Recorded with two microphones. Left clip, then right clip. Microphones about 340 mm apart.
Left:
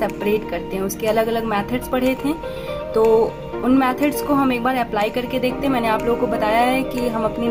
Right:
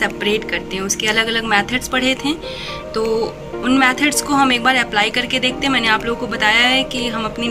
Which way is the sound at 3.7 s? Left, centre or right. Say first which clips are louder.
Right 4 dB; centre.